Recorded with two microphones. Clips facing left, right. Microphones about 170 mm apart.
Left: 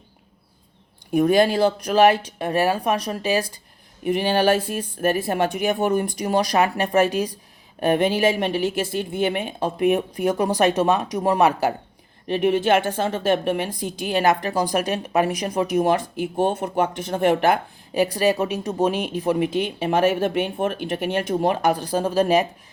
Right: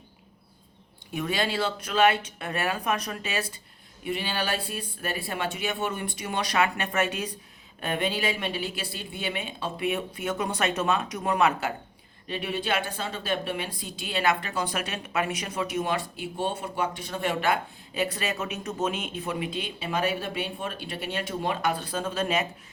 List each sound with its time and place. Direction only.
1.1 s speech: 45° left (ahead or behind)
7.8 s speech: 45° left (ahead or behind)
12.4 s speech: 50° left (ahead or behind)
18.1 s speech: 35° left (ahead or behind)